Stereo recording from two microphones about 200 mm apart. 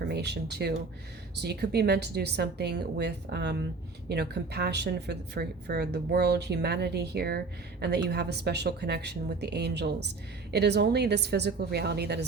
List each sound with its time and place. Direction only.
0.1 s speech: 55° right (ahead or behind)